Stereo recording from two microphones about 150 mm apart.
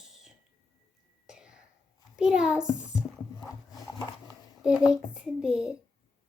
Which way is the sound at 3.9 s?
25° left (ahead or behind).